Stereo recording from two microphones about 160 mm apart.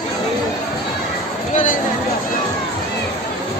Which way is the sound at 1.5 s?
55° left (ahead or behind).